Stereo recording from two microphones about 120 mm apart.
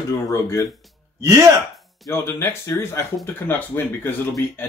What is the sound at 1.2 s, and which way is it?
Speech, 25° right (ahead or behind).